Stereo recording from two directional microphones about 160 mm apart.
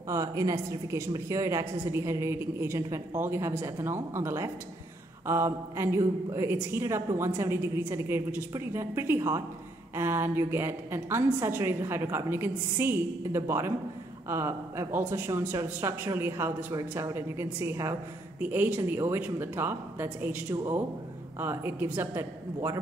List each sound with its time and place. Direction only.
0.1 s a woman's voice: 20° right (ahead or behind)